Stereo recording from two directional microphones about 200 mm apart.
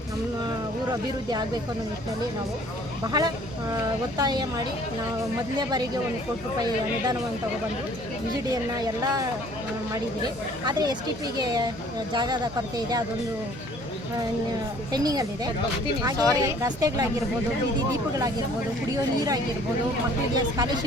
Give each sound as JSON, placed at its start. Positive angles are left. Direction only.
{"t": 3.1, "sound": "speech", "side_deg": -20}
{"t": 8.8, "sound": "a woman's voice", "side_deg": -20}
{"t": 10.7, "sound": "speech", "side_deg": -20}
{"t": 14.9, "sound": "speech", "side_deg": -20}
{"t": 16.3, "sound": "a woman's voice", "side_deg": -15}
{"t": 18.9, "sound": "a woman's voice", "side_deg": -15}